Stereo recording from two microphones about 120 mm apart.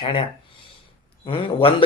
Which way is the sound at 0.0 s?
50° left (ahead or behind).